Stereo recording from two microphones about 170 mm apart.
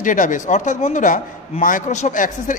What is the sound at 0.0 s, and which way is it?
A man's voice, 50° left (ahead or behind).